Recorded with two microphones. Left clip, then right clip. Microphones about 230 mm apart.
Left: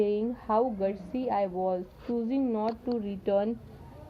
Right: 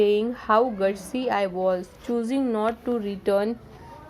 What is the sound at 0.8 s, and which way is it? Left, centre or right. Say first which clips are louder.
Speech: right 6 dB; right.